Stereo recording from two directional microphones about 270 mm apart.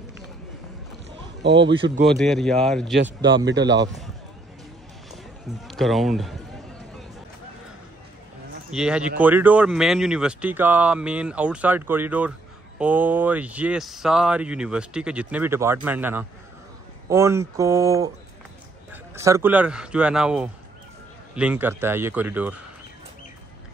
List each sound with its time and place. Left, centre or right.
1.5 s a man's voice: centre
2.0 s speech: centre
3.4 s a man's voice: right
5.7 s speech: centre
8.7 s a man's voice: centre